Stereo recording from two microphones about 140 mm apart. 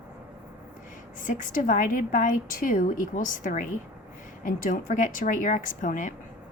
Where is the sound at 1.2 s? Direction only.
70° left (ahead or behind).